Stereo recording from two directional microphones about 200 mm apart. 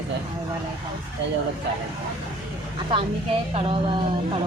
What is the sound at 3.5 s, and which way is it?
Speech, 25° right (ahead or behind).